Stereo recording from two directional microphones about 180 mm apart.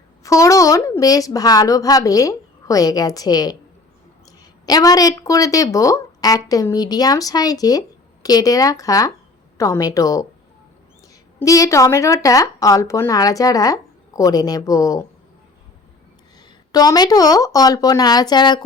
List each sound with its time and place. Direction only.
0.2 s a woman's voice: 15° left (ahead or behind)
11.3 s a woman's voice: 20° left (ahead or behind)
16.7 s a woman's voice: 20° left (ahead or behind)